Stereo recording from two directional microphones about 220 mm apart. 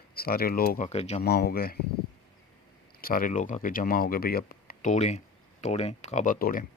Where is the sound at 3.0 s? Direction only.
40° left (ahead or behind).